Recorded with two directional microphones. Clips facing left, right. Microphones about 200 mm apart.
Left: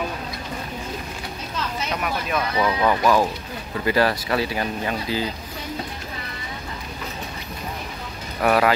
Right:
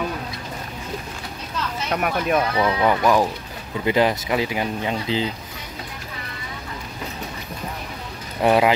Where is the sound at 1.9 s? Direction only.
55° right (ahead or behind).